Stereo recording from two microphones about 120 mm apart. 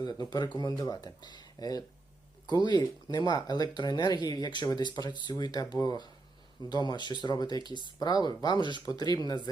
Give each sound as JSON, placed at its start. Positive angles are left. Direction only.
{"t": 0.0, "sound": "speech", "side_deg": 35}